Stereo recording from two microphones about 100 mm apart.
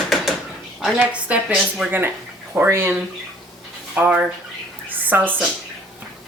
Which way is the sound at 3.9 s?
15° right (ahead or behind).